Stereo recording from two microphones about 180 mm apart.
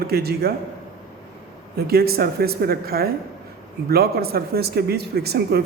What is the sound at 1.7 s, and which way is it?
A man's voice, 60° right (ahead or behind).